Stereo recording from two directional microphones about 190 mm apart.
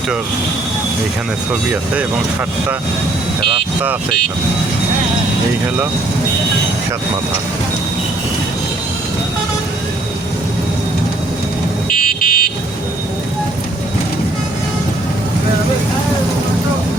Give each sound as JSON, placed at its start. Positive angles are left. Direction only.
{"t": 11.9, "sound": "car alarm", "side_deg": 45}